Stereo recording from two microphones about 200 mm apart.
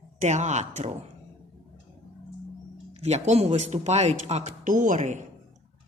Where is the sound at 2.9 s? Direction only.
30° right (ahead or behind).